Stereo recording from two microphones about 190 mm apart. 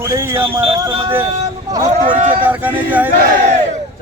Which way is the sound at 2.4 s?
10° right (ahead or behind).